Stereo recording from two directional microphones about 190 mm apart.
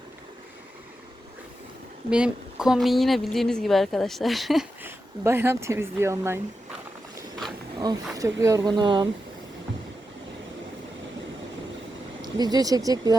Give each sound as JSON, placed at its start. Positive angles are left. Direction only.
{"t": 2.0, "sound": "a woman's voice", "side_deg": -5}
{"t": 4.8, "sound": "speech", "side_deg": -10}
{"t": 7.9, "sound": "speech", "side_deg": -20}
{"t": 12.2, "sound": "speech", "side_deg": -20}